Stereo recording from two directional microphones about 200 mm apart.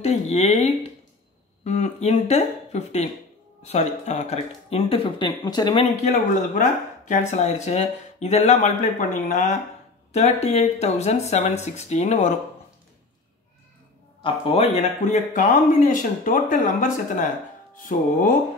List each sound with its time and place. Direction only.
0.0 s speech: 35° left (ahead or behind)
6.0 s speech: 40° left (ahead or behind)
14.2 s speech: 30° left (ahead or behind)